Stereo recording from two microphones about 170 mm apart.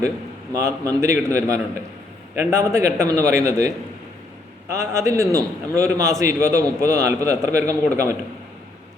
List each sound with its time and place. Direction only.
0.5 s a man's voice: 20° right (ahead or behind)
4.7 s a man's voice: 15° right (ahead or behind)